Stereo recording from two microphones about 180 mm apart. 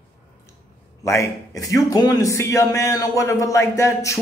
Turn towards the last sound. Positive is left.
turn(degrees=15)  # may be behind; listen again after turning